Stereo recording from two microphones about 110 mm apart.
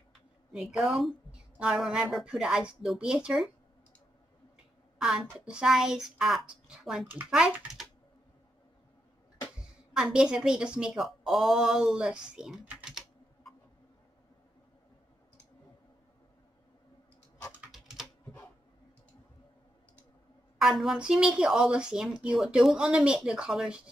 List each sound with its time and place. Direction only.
0.5 s a woman's voice: 5° right (ahead or behind)
4.9 s a woman's voice: 5° right (ahead or behind)
9.6 s speech: 5° right (ahead or behind)
17.6 s typing: 5° right (ahead or behind)
20.8 s speech: 5° right (ahead or behind)